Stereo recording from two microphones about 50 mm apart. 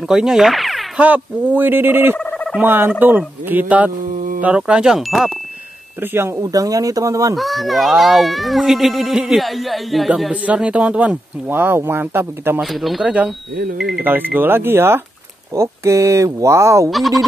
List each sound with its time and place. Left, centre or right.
0.1 s speech: centre
0.9 s speech: right
2.1 s a sound: centre
2.6 s speech: right; by 5.3 s centre
6.1 s speech: right
7.3 s speech: centre
10.3 s speech: right
11.4 s speech: right
13.0 s speech: right
14.0 s speech: right
15.5 s speech: right
16.9 s speech: centre